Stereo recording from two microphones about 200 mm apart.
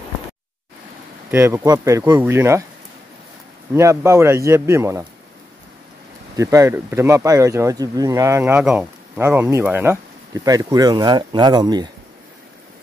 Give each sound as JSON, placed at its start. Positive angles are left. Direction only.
{"t": 1.3, "sound": "speech", "side_deg": -10}
{"t": 3.7, "sound": "speech", "side_deg": -15}
{"t": 6.3, "sound": "speech", "side_deg": -15}